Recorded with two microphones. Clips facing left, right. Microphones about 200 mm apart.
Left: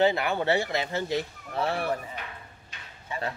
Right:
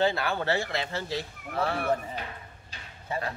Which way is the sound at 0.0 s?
20° left (ahead or behind).